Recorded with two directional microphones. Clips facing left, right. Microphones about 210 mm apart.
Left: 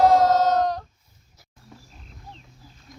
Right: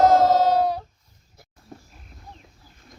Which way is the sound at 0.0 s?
5° right (ahead or behind).